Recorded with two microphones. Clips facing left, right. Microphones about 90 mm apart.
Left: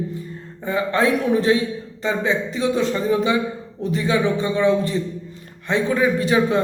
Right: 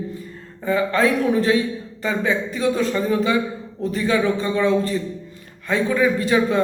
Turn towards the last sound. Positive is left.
turn(degrees=20)  # may be behind; listen again after turning